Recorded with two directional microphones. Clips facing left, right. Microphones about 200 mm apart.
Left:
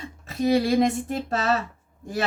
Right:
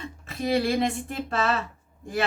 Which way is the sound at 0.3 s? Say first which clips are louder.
Left 4 dB; 40° left (ahead or behind).